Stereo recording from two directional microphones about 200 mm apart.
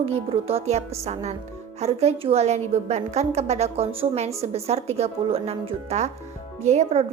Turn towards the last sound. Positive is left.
turn(degrees=-35)  # may be behind; listen again after turning